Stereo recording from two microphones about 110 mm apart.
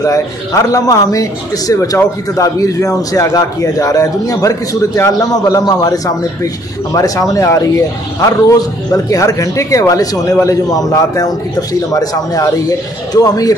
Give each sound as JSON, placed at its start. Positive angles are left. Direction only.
{"t": 0.0, "sound": "a man's voice", "side_deg": 30}